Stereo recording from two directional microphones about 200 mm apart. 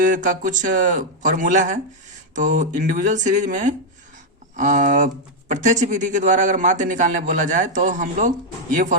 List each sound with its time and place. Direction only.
0.0 s speech: 40° right (ahead or behind)